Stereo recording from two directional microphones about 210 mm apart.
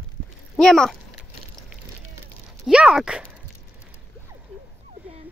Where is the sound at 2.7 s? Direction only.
5° right (ahead or behind).